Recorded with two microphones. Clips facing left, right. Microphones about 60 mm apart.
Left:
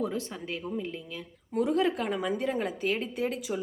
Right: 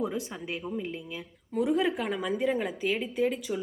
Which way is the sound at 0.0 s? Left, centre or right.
Centre.